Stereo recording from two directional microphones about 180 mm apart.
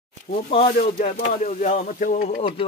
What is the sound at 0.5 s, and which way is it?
Speech, 30° left (ahead or behind).